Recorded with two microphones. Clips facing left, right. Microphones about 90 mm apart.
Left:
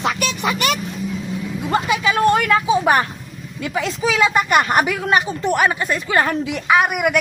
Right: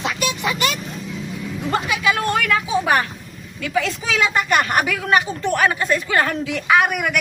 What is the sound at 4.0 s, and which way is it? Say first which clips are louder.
Speech: left 4 dB; centre (ahead or behind).